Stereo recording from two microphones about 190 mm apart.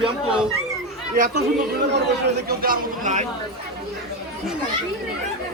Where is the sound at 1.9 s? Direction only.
60° right (ahead or behind); by 3.2 s 40° right (ahead or behind).